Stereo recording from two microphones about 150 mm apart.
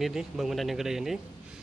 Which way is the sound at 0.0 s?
Centre (ahead or behind).